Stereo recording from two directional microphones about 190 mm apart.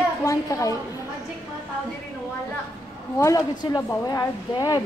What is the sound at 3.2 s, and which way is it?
Speech, 20° left (ahead or behind).